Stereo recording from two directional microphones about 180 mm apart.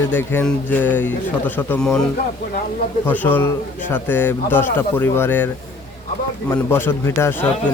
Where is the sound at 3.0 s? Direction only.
10° left (ahead or behind).